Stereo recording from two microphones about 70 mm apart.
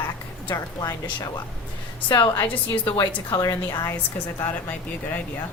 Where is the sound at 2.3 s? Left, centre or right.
Left.